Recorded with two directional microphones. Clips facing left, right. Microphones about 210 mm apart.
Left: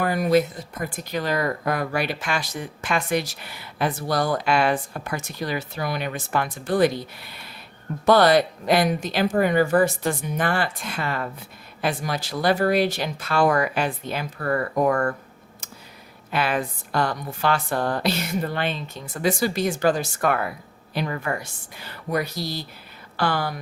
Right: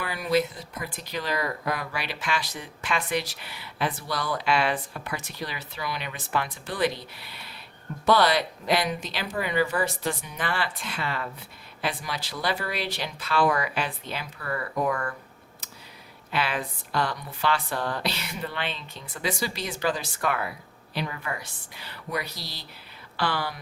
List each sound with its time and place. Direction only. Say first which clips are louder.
0.0 s speech: left 6 dB; 45° left (ahead or behind)
16.3 s speech: left 5 dB; 45° left (ahead or behind)